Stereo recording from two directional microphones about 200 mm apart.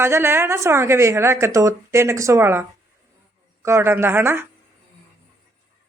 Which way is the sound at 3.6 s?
15° right (ahead or behind).